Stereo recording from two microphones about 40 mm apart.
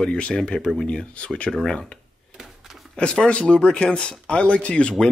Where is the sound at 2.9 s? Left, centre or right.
Left.